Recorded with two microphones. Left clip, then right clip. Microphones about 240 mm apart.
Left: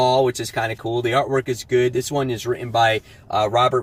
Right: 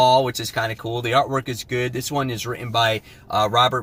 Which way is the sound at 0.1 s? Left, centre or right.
Centre.